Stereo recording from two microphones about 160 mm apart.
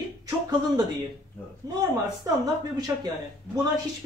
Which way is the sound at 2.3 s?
25° right (ahead or behind).